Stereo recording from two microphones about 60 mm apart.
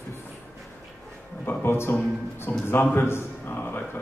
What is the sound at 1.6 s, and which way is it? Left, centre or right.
A man's voice, left.